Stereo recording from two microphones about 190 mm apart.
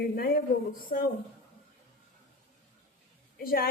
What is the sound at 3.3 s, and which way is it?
Speech, 50° left (ahead or behind).